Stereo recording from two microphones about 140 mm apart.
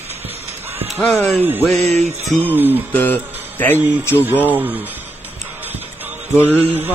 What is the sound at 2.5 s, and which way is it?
Speech, 15° right (ahead or behind).